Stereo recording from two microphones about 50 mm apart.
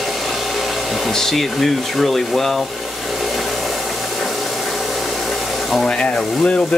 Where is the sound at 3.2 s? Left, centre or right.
Centre.